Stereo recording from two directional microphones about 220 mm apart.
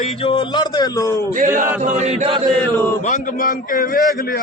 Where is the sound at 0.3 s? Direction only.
20° left (ahead or behind).